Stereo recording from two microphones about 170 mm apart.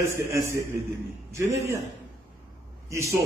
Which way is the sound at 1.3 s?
15° right (ahead or behind).